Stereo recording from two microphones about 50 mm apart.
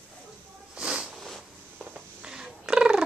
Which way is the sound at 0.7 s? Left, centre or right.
Centre.